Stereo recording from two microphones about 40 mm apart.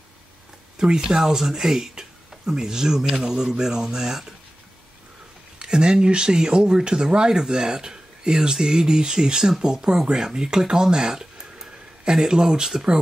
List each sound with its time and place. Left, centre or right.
0.7 s speech: right
5.6 s speech: right